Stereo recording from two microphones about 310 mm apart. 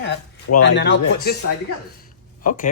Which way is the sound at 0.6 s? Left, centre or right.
Left.